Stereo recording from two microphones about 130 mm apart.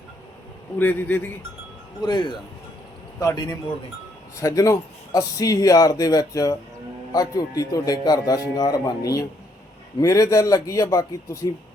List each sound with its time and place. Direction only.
0.8 s a man's voice: 15° left (ahead or behind)
2.0 s speech: 35° left (ahead or behind)